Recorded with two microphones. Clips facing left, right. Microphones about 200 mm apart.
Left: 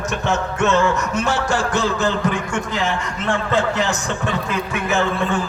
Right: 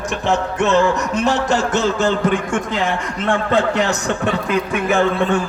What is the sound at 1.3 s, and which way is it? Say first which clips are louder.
Speech: right 5 dB; 20° right (ahead or behind).